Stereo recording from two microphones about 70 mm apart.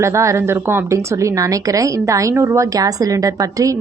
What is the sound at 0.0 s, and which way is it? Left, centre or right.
Speech, right.